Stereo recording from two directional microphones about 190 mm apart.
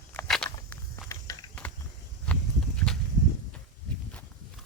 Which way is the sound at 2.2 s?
5° left (ahead or behind).